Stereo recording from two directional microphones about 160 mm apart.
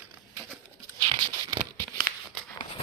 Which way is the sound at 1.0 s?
25° right (ahead or behind).